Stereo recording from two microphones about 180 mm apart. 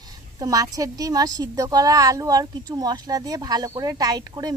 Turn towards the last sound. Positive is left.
turn(degrees=-20)  # may be behind; listen again after turning